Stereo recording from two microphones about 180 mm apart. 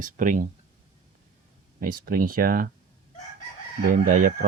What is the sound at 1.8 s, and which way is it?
Speech, 50° right (ahead or behind).